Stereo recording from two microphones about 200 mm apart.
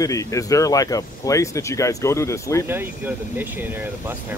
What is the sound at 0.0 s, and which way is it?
Speech, 15° left (ahead or behind).